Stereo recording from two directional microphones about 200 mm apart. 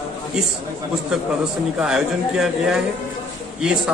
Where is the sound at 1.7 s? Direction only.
5° right (ahead or behind).